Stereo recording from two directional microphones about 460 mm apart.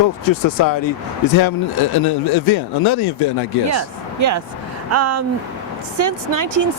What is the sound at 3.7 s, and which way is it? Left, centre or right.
Speech, right.